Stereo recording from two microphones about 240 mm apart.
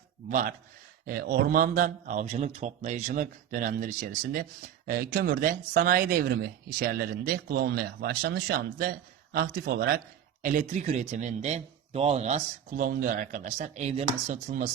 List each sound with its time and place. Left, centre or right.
0.3 s speech: right